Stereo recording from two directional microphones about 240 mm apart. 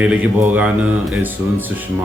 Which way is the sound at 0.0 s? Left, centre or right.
Centre.